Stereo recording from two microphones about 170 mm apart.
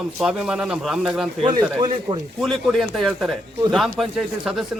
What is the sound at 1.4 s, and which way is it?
Speech, 30° right (ahead or behind).